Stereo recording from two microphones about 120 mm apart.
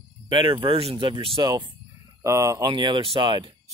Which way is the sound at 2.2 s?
25° right (ahead or behind).